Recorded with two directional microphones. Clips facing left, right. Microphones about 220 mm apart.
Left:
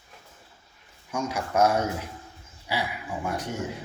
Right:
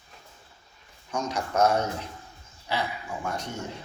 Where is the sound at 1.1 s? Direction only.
10° left (ahead or behind).